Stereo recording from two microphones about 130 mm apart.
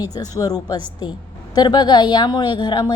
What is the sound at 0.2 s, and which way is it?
A woman's voice, 30° left (ahead or behind).